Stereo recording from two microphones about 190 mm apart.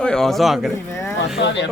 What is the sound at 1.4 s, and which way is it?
Speech, 70° left (ahead or behind).